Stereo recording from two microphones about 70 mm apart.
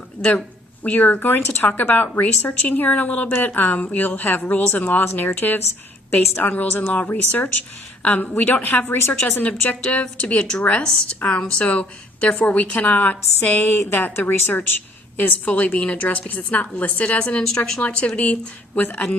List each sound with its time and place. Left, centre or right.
0.2 s speech: centre
8.9 s a woman's voice: left
9.3 s a woman's voice: left